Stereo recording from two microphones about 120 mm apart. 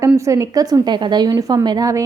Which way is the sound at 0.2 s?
25° right (ahead or behind).